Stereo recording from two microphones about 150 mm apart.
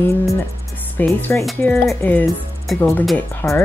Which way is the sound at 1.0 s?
15° left (ahead or behind).